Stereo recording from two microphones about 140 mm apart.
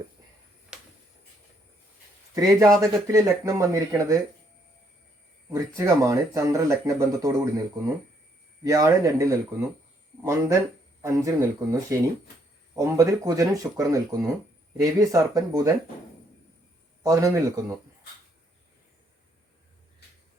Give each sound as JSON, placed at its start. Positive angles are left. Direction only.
{"t": 0.7, "sound": "a sound", "side_deg": -5}
{"t": 2.3, "sound": "speech", "side_deg": -25}
{"t": 5.5, "sound": "speech", "side_deg": -20}
{"t": 8.6, "sound": "speech", "side_deg": -25}
{"t": 17.0, "sound": "speech", "side_deg": -25}